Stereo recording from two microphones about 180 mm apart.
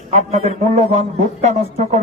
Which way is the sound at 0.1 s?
40° right (ahead or behind).